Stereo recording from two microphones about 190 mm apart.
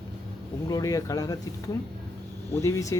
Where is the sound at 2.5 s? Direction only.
15° left (ahead or behind).